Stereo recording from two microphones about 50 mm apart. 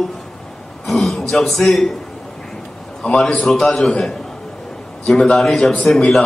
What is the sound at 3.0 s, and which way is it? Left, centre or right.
Speech, left.